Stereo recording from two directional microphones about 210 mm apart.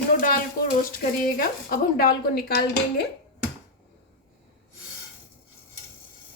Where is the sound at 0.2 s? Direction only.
40° left (ahead or behind).